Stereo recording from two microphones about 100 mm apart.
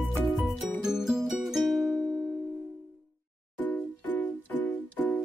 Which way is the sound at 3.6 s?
15° left (ahead or behind).